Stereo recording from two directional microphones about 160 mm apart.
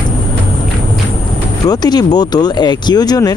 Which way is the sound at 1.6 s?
25° left (ahead or behind).